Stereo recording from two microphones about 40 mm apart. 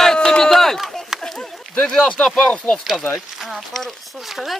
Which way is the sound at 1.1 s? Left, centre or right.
Centre.